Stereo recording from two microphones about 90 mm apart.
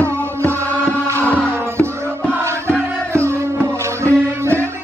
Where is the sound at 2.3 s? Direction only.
30° right (ahead or behind).